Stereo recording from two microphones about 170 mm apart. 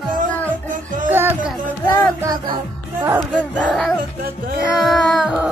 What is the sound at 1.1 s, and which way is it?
Music, 10° right (ahead or behind).